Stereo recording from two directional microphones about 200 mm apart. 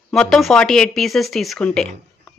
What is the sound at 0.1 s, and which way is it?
Speech, centre (ahead or behind).